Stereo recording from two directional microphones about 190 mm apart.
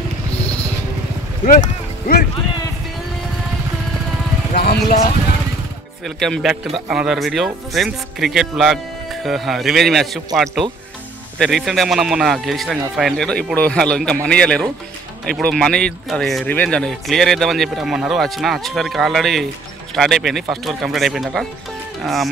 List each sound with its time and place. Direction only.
1.4 s boat: 40° left (ahead or behind)
4.6 s vehicle: 55° left (ahead or behind)
6.0 s speech: centre (ahead or behind)